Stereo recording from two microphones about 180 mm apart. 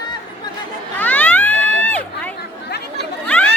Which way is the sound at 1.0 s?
10° left (ahead or behind).